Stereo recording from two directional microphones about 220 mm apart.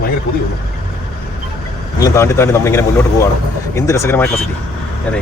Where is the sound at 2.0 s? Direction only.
15° left (ahead or behind).